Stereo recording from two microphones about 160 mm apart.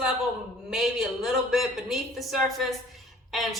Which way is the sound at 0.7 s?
Centre (ahead or behind).